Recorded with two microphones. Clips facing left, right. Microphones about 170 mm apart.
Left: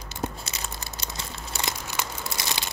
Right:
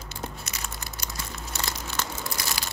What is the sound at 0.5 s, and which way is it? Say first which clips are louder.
Crumpling: left 1 dB; 25° left (ahead or behind).